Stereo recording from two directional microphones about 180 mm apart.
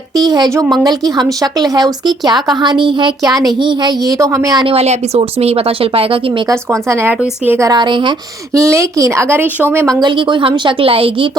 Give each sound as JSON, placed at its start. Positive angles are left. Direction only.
{"t": 0.1, "sound": "speech", "side_deg": -20}
{"t": 4.6, "sound": "speech", "side_deg": -35}
{"t": 6.5, "sound": "speech", "side_deg": -15}
{"t": 8.5, "sound": "speech", "side_deg": -15}